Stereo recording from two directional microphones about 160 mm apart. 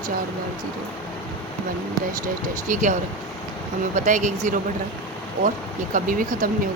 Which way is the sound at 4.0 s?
50° right (ahead or behind).